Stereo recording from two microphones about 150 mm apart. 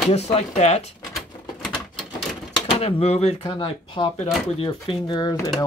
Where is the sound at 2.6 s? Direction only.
40° left (ahead or behind).